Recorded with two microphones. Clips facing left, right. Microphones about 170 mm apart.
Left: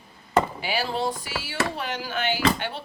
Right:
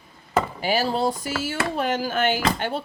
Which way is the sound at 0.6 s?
45° right (ahead or behind).